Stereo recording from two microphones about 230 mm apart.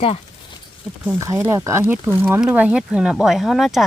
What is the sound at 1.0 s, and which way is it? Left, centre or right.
Speech, centre.